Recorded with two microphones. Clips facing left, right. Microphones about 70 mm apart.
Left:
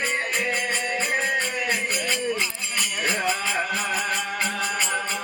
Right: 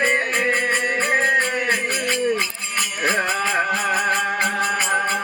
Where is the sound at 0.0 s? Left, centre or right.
Right.